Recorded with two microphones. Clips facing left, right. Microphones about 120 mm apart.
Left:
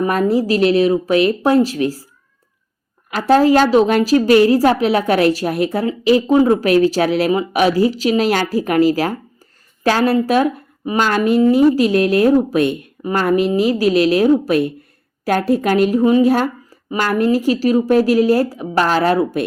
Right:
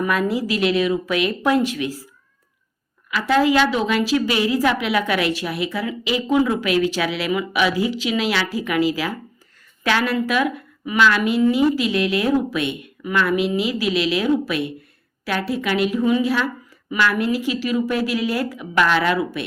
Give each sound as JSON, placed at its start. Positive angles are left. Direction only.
{"t": 0.0, "sound": "a woman's voice", "side_deg": 40}
{"t": 3.1, "sound": "a woman's voice", "side_deg": 40}